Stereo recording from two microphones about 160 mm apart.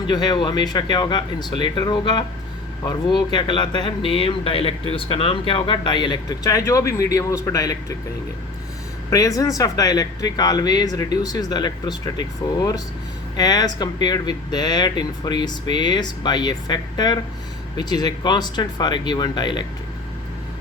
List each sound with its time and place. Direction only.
0.1 s speech: 25° left (ahead or behind)
9.0 s speech: 20° left (ahead or behind)